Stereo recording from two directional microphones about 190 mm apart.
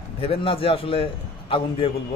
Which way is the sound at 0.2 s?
30° left (ahead or behind).